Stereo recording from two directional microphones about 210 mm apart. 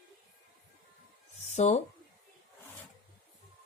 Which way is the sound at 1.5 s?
30° left (ahead or behind).